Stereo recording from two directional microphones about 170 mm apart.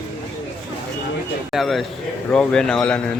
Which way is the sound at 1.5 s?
Centre (ahead or behind).